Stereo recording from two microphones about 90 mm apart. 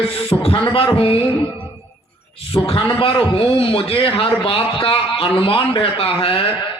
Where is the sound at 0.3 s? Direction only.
90° left.